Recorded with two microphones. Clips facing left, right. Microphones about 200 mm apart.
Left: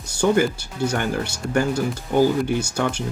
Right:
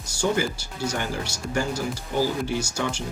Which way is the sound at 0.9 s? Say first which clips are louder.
Left 4 dB; 60° left (ahead or behind).